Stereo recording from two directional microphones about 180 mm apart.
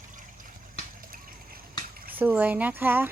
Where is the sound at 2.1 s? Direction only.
10° right (ahead or behind).